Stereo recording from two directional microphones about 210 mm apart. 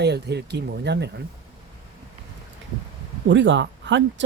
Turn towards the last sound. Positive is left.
turn(degrees=-60)  # may be behind; listen again after turning